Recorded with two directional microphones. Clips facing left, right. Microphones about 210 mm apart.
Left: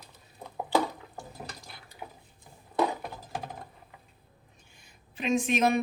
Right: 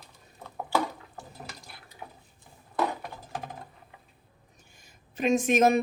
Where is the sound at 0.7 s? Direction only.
20° left (ahead or behind).